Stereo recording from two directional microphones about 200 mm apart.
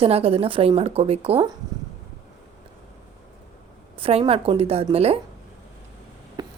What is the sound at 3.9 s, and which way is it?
Speech, 30° right (ahead or behind).